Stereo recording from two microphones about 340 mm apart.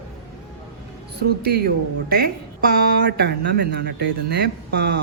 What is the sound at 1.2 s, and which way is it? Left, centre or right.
Speech, right.